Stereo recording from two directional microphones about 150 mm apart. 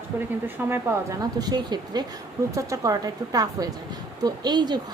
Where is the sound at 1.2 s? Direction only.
25° right (ahead or behind).